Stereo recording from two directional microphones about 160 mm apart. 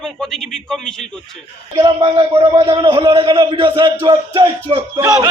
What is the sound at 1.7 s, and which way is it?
A man's voice, 25° right (ahead or behind).